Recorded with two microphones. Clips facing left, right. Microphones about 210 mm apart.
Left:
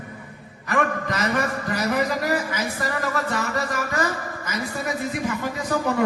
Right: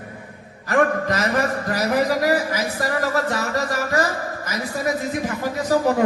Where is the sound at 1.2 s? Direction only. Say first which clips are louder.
Right 3 dB; 35° right (ahead or behind).